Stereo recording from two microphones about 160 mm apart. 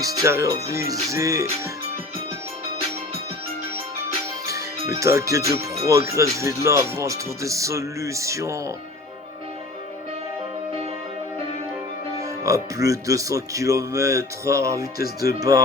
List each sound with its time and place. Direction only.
0.0 s speech: 20° right (ahead or behind)
4.5 s speech: 20° right (ahead or behind)
12.2 s speech: 20° right (ahead or behind)